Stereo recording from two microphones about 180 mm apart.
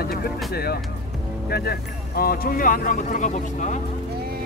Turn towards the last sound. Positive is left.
turn(degrees=40)  # may be behind; listen again after turning